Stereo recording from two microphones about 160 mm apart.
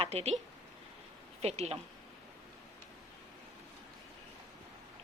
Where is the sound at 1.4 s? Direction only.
40° right (ahead or behind).